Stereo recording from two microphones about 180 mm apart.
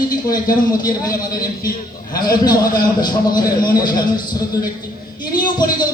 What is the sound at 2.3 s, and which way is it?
A man's voice, 25° left (ahead or behind).